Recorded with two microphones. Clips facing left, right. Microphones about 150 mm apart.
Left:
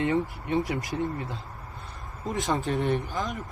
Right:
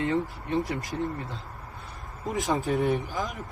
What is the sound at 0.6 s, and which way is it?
Speech, 20° left (ahead or behind).